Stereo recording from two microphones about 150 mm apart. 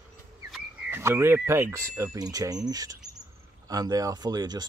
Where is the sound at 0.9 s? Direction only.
15° right (ahead or behind).